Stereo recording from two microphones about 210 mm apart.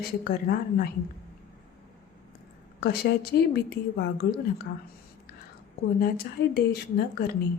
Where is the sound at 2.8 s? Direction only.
50° left (ahead or behind).